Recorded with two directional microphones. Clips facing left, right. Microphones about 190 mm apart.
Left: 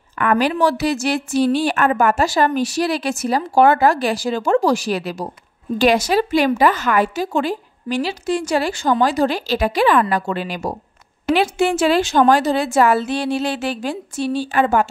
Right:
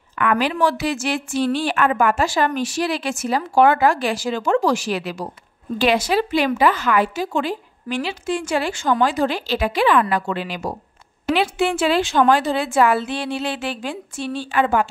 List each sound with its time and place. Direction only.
0.2 s a woman's voice: 40° left (ahead or behind)